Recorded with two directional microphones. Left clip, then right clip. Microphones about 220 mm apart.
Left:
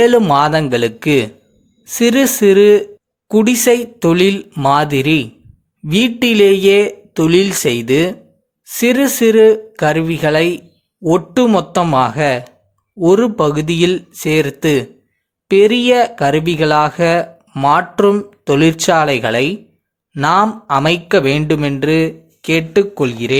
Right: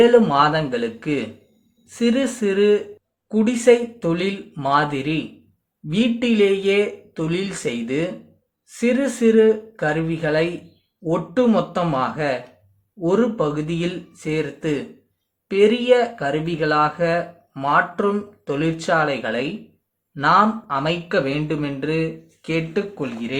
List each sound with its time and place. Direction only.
0.0 s speech: 45° left (ahead or behind)